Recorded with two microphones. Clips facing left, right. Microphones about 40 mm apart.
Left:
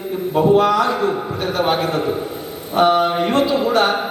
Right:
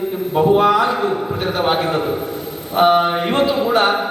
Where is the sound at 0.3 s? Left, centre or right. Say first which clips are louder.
Right 1 dB; centre.